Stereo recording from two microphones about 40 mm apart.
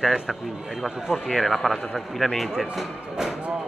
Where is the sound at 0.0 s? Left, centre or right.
Centre.